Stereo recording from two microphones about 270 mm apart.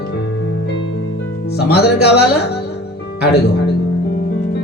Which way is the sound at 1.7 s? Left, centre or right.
Left.